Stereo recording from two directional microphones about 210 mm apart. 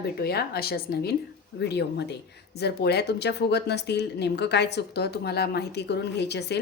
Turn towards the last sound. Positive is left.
turn(degrees=55)  # may be behind; listen again after turning